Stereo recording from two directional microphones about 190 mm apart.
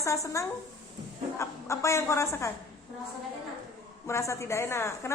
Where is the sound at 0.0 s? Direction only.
15° left (ahead or behind).